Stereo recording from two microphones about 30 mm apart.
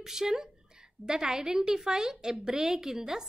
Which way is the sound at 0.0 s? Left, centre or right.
Centre.